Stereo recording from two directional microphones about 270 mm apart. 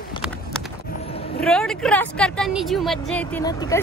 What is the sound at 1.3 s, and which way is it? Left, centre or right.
Vehicle, centre.